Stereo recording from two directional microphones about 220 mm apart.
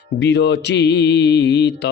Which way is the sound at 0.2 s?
50° left (ahead or behind).